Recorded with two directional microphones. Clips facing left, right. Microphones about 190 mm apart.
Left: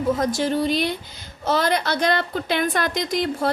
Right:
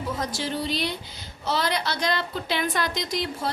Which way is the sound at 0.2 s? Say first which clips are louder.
Left 7 dB; 50° left (ahead or behind).